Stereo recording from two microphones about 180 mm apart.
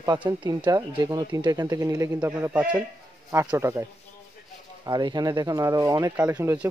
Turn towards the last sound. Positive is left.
turn(degrees=-10)  # may be behind; listen again after turning